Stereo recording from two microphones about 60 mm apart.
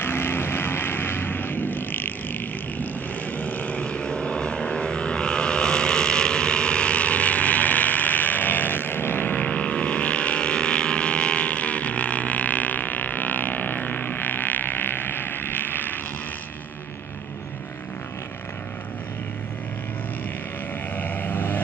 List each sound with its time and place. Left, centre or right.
0.0 s vehicle: left
20.9 s vehicle: left